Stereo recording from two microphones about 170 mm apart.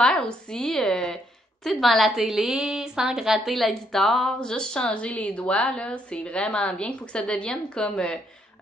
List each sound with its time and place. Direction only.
0.0 s a woman's voice: 5° left (ahead or behind)